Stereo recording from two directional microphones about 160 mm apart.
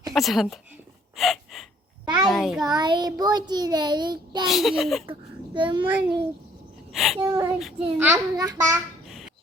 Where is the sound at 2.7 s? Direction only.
25° right (ahead or behind).